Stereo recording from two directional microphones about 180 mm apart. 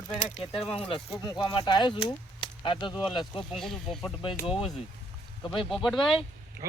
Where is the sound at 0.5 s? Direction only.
30° left (ahead or behind).